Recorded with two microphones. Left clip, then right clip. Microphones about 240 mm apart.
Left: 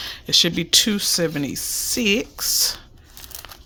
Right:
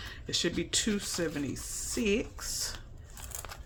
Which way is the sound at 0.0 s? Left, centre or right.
Left.